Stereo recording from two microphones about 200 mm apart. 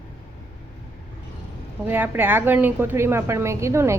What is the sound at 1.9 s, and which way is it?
A woman's voice, 10° right (ahead or behind).